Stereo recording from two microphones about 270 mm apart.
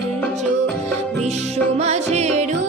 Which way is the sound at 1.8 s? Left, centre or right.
Right.